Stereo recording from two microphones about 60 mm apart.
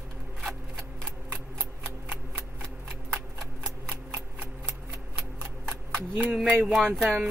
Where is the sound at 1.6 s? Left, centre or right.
Right.